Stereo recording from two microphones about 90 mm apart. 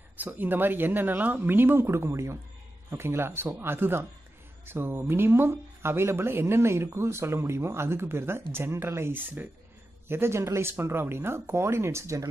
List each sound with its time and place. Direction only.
0.2 s speech: 20° right (ahead or behind)